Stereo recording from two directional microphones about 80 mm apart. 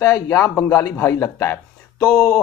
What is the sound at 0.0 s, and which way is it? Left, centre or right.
Speech, left.